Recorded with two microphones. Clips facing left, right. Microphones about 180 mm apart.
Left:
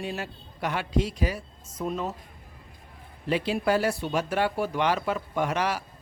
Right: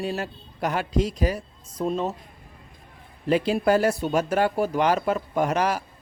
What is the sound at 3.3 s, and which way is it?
Speech, 45° right (ahead or behind).